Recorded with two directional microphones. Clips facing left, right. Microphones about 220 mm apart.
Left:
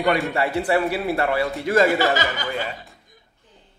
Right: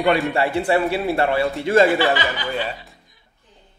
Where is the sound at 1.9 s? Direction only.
45° left (ahead or behind).